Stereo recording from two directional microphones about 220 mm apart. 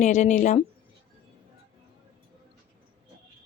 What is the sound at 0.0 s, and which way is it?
Speech, 35° left (ahead or behind).